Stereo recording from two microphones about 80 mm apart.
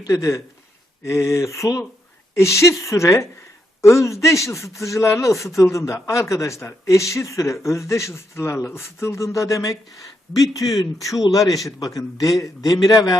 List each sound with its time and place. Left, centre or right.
0.1 s a man's voice: left